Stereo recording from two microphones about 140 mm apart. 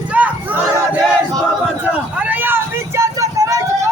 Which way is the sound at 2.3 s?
15° right (ahead or behind).